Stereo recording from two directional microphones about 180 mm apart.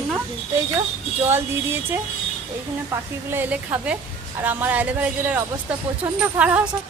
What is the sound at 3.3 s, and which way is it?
A woman's voice, 10° right (ahead or behind).